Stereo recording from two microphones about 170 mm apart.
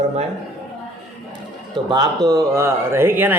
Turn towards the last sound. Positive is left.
turn(degrees=-10)  # may be behind; listen again after turning